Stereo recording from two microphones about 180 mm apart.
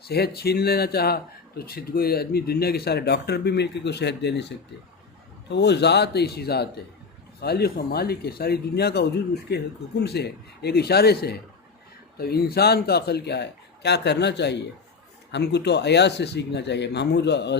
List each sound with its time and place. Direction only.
0.1 s speech: 60° left (ahead or behind)